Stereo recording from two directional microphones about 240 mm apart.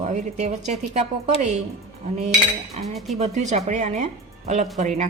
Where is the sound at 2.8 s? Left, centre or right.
Centre.